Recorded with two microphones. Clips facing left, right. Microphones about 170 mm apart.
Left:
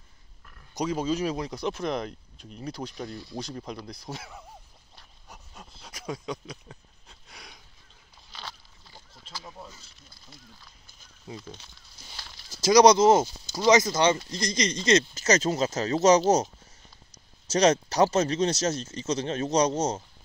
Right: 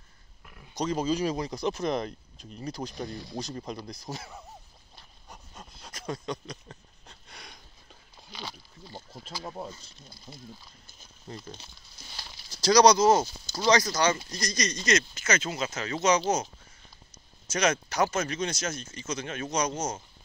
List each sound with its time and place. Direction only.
0.7 s speech: 5° left (ahead or behind)
4.9 s a sound: 5° left (ahead or behind)
9.4 s speech: 50° right (ahead or behind)
11.2 s speech: 5° left (ahead or behind)
12.6 s speech: 25° left (ahead or behind); by 16.4 s 40° left (ahead or behind)
17.5 s speech: 35° left (ahead or behind)